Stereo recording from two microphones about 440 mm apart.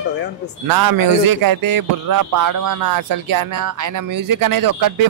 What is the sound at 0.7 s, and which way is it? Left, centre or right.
Speech, right.